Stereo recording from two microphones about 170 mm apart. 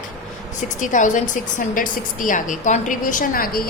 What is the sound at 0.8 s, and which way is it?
A woman's voice, 45° left (ahead or behind).